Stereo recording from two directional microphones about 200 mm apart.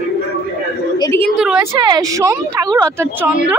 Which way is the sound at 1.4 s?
5° right (ahead or behind).